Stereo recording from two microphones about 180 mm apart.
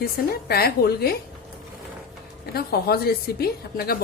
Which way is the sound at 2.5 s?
60° left (ahead or behind).